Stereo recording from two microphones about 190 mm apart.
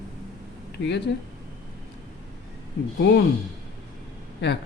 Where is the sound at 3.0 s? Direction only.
65° left (ahead or behind).